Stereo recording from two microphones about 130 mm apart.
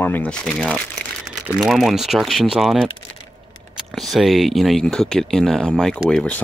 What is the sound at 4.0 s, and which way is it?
Speech, centre (ahead or behind).